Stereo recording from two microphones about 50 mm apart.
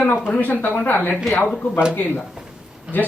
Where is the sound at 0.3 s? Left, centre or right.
Left.